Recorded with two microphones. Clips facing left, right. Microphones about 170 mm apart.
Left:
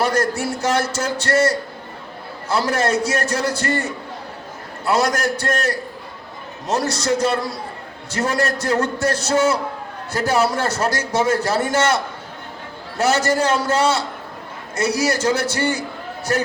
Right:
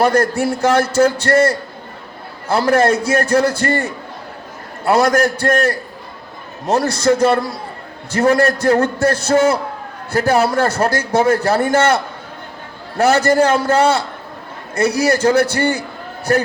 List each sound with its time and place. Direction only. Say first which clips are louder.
0.0 s a man's voice: right 5 dB; 60° right (ahead or behind)
4.9 s a man's voice: right 5 dB; 55° right (ahead or behind)
13.0 s a man's voice: right 5 dB; 55° right (ahead or behind)